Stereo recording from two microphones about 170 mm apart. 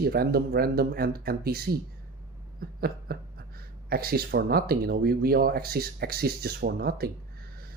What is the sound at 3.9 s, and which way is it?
Speech, 60° right (ahead or behind).